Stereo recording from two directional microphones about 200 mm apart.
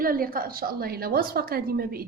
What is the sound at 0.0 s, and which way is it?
A woman's voice, 45° right (ahead or behind).